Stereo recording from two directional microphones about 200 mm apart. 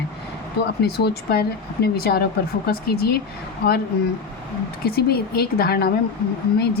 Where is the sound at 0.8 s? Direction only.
50° left (ahead or behind).